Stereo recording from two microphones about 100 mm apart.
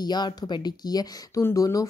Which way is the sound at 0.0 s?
45° left (ahead or behind).